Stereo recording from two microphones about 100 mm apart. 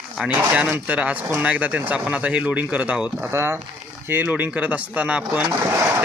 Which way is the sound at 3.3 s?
25° right (ahead or behind).